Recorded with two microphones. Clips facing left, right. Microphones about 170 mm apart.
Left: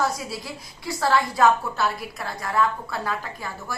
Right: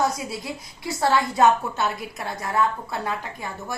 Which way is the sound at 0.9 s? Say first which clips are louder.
Right 1 dB; 25° right (ahead or behind).